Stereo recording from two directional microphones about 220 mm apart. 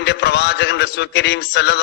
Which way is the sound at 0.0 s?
50° left (ahead or behind).